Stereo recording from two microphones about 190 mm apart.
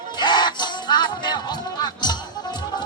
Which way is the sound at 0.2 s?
25° left (ahead or behind).